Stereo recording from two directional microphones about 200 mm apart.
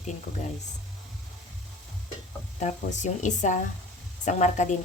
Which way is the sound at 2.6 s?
35° left (ahead or behind).